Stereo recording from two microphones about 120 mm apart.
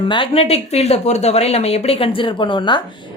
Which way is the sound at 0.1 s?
50° left (ahead or behind).